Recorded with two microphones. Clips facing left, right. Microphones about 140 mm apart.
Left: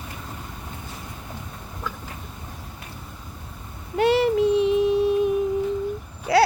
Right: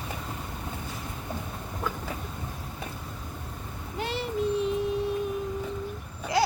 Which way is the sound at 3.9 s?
70° left (ahead or behind).